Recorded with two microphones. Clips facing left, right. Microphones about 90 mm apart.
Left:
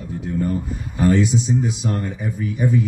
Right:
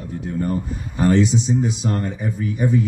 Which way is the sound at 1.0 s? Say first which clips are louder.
Right 1 dB; 25° right (ahead or behind).